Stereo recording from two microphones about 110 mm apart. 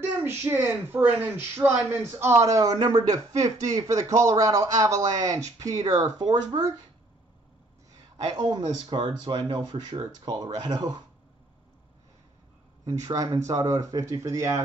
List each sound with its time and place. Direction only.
0.0 s a child's voice: 20° right (ahead or behind)
2.1 s speech: 25° right (ahead or behind); by 6.4 s 40° right (ahead or behind)
8.2 s speech: 40° right (ahead or behind)
13.1 s speech: 30° right (ahead or behind)